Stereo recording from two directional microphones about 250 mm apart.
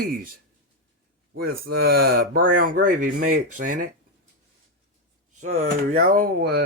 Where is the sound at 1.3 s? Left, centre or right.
Right.